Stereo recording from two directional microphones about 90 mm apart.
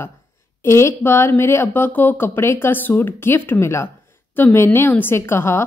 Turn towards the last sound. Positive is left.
turn(degrees=30)  # may be behind; listen again after turning